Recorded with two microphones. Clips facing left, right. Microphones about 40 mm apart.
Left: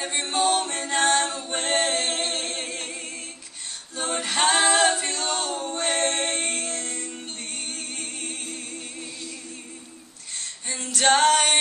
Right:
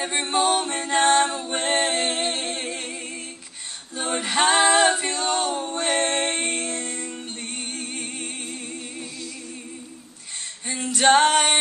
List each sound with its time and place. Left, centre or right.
0.4 s a capella: centre
0.7 s music: centre
1.4 s a capella: centre
2.7 s music: right
3.9 s a capella: centre
7.7 s music: centre
10.7 s female singing: centre